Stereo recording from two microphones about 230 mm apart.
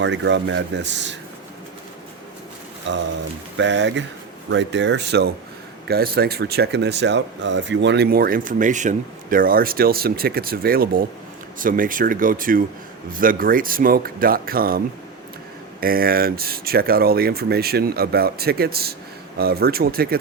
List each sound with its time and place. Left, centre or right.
0.0 s speech: right
2.9 s speech: right
15.8 s speech: right